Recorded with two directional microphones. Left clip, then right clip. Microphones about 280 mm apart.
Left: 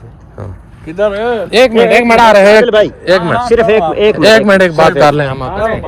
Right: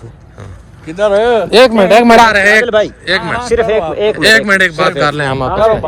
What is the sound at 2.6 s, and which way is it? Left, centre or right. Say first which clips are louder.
Speech: left 3 dB; left.